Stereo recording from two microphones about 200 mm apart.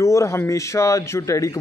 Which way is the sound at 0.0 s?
15° left (ahead or behind).